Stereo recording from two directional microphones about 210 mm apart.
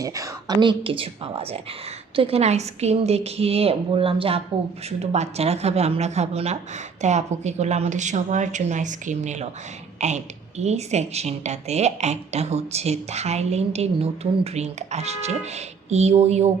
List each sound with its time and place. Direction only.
0.0 s a woman's voice: 15° right (ahead or behind)